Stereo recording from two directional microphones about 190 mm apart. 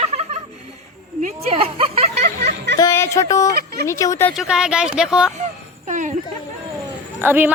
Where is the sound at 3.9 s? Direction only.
15° left (ahead or behind).